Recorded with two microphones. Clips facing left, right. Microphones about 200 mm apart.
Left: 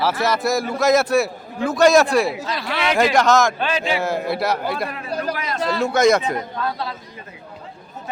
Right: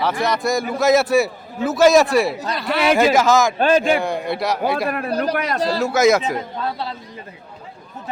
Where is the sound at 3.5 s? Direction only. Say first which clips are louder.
Right 7 dB; 45° right (ahead or behind).